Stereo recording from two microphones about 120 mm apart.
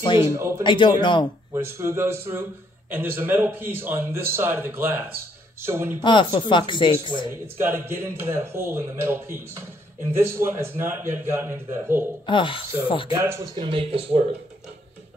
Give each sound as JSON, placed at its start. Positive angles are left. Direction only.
{"t": 0.2, "sound": "a man's voice", "side_deg": -25}
{"t": 0.7, "sound": "a man's voice", "side_deg": 40}
{"t": 1.5, "sound": "a man's voice", "side_deg": -20}
{"t": 5.9, "sound": "a man's voice", "side_deg": 40}
{"t": 7.5, "sound": "a man's voice", "side_deg": -20}
{"t": 12.3, "sound": "speech", "side_deg": 45}
{"t": 13.2, "sound": "a man's voice", "side_deg": -20}
{"t": 13.6, "sound": "speech", "side_deg": -50}